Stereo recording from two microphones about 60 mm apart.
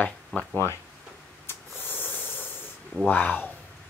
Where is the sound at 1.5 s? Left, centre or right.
Left.